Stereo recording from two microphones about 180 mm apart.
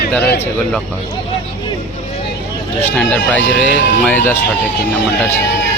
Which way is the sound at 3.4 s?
80° left.